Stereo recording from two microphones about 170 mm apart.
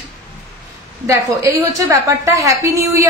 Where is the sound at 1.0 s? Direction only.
15° right (ahead or behind).